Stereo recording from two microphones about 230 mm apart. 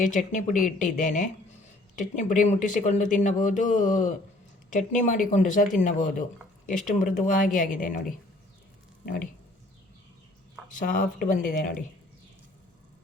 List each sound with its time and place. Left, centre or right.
0.0 s speech: left
10.8 s speech: left